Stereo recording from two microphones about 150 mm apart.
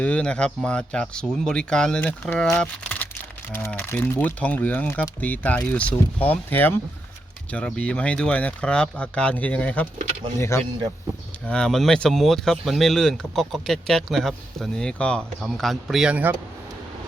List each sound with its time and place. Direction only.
0.0 s speech: 5° left (ahead or behind)
11.4 s speech: 5° left (ahead or behind)